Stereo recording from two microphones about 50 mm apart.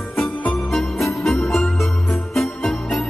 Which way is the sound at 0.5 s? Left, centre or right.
Centre.